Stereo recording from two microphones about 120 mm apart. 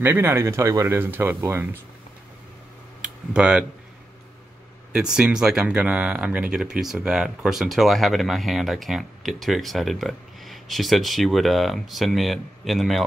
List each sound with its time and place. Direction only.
0.0 s speech: 20° right (ahead or behind)
3.0 s a sound: 10° right (ahead or behind)
4.9 s speech: 5° right (ahead or behind)